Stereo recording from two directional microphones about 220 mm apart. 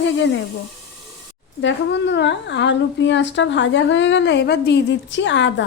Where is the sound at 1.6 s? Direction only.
55° left (ahead or behind).